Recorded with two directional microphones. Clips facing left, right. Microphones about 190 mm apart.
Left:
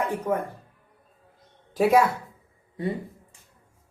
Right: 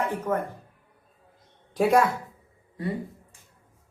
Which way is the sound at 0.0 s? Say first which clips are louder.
Left 1 dB; 15° left (ahead or behind).